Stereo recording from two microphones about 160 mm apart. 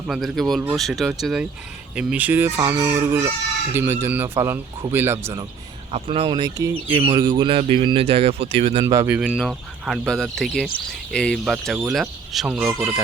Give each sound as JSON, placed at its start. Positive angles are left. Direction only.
{"t": 0.1, "sound": "speech", "side_deg": 0}
{"t": 5.9, "sound": "speech", "side_deg": -35}
{"t": 6.8, "sound": "speech", "side_deg": -15}
{"t": 7.2, "sound": "speech", "side_deg": -25}
{"t": 8.8, "sound": "speech", "side_deg": -20}
{"t": 9.4, "sound": "speech", "side_deg": 0}